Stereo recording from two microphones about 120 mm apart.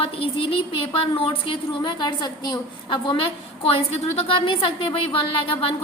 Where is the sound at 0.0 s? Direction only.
50° left (ahead or behind).